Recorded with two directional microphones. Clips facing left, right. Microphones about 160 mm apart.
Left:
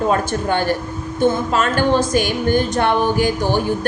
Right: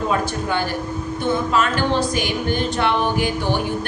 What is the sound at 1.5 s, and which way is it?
A woman's voice, 45° left (ahead or behind).